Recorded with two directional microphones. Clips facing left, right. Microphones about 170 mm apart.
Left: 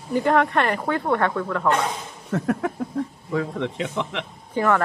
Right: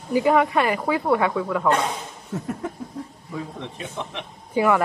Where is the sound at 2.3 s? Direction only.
90° left.